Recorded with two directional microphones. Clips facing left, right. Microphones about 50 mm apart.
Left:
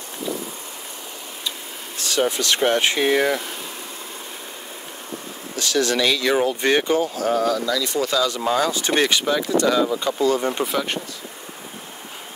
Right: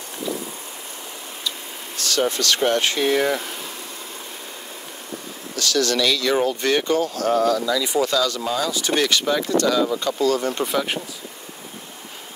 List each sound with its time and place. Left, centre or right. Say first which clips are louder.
2.0 s speech: even; centre
5.6 s speech: even; left; by 7.7 s centre
7.7 s speech: right 2 dB; centre
8.2 s speech: even; left
8.5 s speech: left 3 dB; left
9.6 s speech: left 1 dB; centre
10.6 s speech: even; centre